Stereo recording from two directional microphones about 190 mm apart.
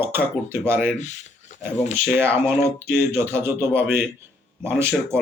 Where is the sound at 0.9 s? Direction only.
40° left (ahead or behind).